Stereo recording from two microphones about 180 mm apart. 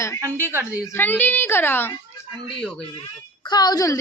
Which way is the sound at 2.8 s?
30° left (ahead or behind).